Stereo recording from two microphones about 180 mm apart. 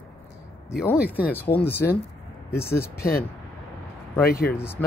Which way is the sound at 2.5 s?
15° left (ahead or behind).